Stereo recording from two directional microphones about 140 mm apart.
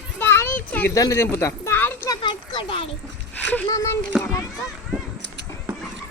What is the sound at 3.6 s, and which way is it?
Speech, 20° left (ahead or behind).